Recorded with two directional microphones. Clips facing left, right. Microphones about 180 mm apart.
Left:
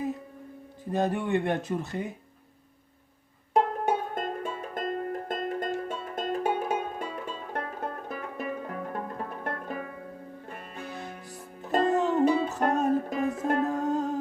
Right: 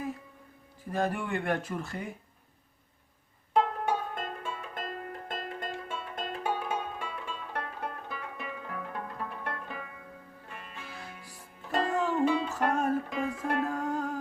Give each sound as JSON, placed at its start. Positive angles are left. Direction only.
{"t": 0.9, "sound": "speech", "side_deg": 20}
{"t": 3.5, "sound": "music", "side_deg": 45}
{"t": 11.8, "sound": "music", "side_deg": 20}
{"t": 12.1, "sound": "music", "side_deg": 40}
{"t": 12.6, "sound": "music", "side_deg": 20}
{"t": 13.1, "sound": "music", "side_deg": 40}
{"t": 13.6, "sound": "music", "side_deg": 20}